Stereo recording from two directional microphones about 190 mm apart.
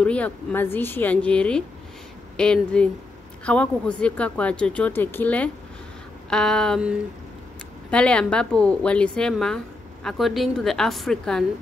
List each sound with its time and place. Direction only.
0.0 s a woman's voice: 5° left (ahead or behind)